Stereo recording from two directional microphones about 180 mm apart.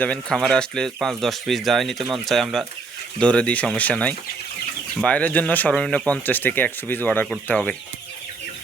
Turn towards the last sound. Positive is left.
turn(degrees=5)  # may be behind; listen again after turning